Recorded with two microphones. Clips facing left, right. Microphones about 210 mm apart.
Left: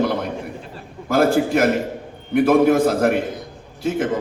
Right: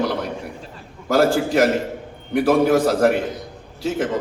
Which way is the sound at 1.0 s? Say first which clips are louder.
Left 1 dB; 55° left (ahead or behind).